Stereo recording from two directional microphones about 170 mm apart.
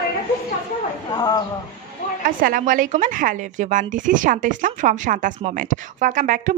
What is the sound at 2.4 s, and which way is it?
A woman's voice, 55° right (ahead or behind).